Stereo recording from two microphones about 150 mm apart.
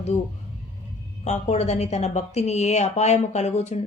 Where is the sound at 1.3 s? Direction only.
45° left (ahead or behind).